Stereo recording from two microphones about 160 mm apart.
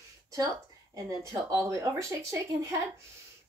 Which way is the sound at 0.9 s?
20° right (ahead or behind).